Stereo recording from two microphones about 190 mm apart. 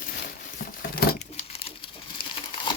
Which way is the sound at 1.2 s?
35° left (ahead or behind).